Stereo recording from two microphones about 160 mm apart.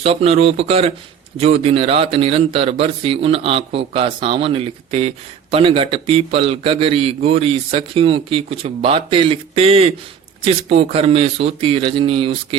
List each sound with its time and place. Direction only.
0.0 s speech: 40° right (ahead or behind)